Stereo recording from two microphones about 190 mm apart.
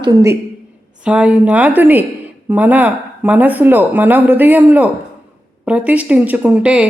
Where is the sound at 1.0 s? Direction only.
5° right (ahead or behind).